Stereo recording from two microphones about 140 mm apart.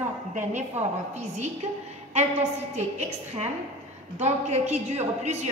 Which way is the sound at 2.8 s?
55° right (ahead or behind).